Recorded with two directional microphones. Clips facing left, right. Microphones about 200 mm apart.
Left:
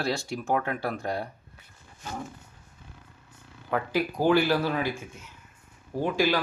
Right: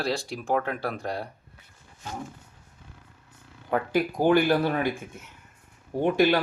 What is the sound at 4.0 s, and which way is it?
Speech, 15° right (ahead or behind).